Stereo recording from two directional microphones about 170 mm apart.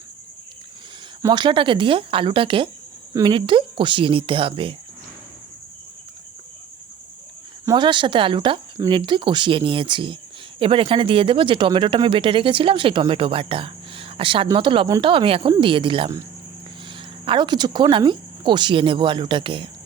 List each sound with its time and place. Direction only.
1.2 s speech: 25° right (ahead or behind)
7.6 s speech: 25° right (ahead or behind)
17.2 s speech: 25° right (ahead or behind)